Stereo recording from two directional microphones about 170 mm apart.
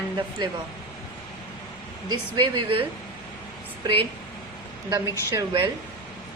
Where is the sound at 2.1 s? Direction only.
25° right (ahead or behind).